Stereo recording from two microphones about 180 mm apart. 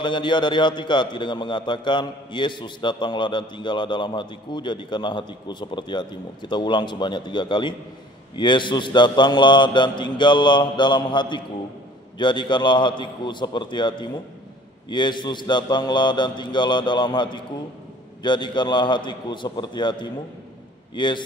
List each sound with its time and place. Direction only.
0.0 s a man's voice: 25° left (ahead or behind)